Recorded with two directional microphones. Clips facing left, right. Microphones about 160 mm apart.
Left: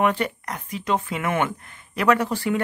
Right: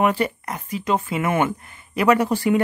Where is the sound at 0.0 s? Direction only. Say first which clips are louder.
Right 2 dB; 5° right (ahead or behind).